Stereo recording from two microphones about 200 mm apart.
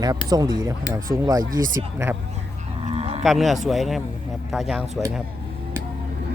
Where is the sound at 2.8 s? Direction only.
30° right (ahead or behind).